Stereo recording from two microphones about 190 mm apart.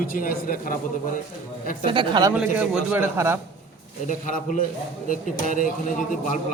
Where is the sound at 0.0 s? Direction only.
50° left (ahead or behind).